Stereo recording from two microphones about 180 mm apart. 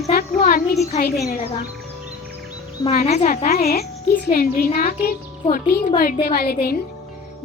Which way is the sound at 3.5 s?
60° left (ahead or behind).